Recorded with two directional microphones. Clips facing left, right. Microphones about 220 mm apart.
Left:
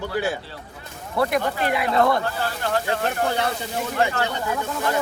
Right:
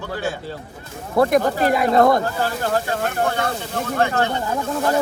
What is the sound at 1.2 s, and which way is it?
Speech, 45° right (ahead or behind).